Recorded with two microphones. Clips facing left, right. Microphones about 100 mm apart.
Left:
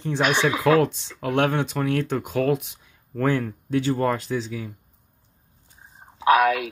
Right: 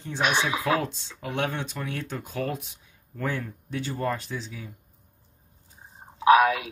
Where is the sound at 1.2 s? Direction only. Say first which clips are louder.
Left 8 dB; 70° left (ahead or behind); by 4.6 s 90° left.